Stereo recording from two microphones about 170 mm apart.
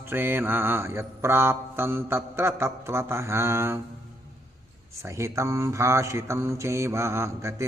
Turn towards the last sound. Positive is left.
turn(degrees=-15)  # may be behind; listen again after turning